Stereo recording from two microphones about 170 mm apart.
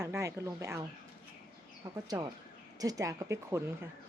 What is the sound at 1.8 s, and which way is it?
Speech, 20° right (ahead or behind).